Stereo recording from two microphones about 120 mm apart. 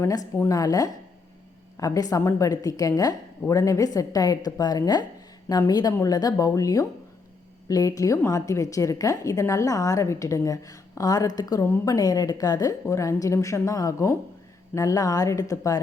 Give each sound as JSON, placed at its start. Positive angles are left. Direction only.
{"t": 0.3, "sound": "a woman's voice", "side_deg": 25}